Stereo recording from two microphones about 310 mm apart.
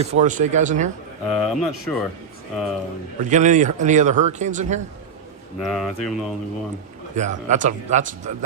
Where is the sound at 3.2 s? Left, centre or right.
Right.